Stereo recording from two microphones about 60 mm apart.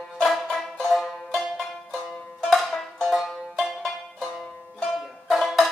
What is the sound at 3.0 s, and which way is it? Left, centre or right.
Banjo, centre.